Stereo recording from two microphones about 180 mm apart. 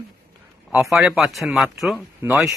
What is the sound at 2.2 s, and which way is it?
Speech, 15° right (ahead or behind).